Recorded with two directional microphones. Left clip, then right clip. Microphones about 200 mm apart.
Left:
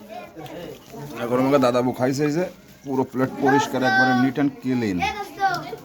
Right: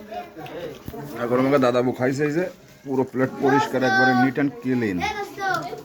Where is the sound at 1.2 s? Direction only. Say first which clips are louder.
Even; 5° left (ahead or behind).